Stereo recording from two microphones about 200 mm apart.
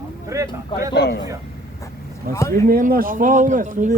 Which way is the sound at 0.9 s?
60° left (ahead or behind).